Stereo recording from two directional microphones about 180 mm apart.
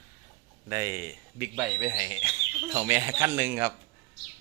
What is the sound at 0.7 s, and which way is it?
A man's voice, 15° right (ahead or behind).